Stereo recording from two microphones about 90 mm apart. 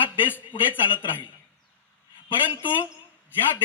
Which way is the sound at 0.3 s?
20° left (ahead or behind).